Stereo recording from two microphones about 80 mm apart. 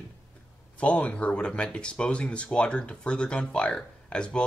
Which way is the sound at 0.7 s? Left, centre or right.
Centre.